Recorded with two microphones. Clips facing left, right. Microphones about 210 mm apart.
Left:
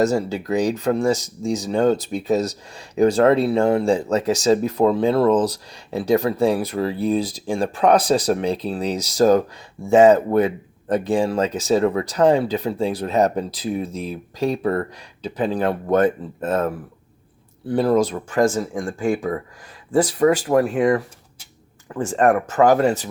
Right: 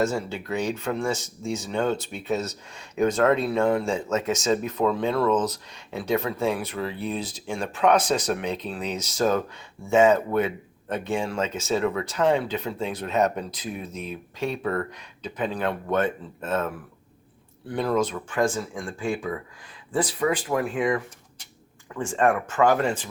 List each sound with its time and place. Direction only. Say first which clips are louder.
0.0 s speech: left 6 dB; 40° left (ahead or behind)